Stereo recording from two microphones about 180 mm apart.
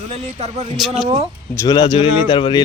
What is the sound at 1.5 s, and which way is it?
Speech, 25° left (ahead or behind).